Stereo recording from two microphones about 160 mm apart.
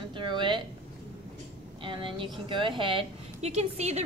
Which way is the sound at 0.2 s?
30° right (ahead or behind).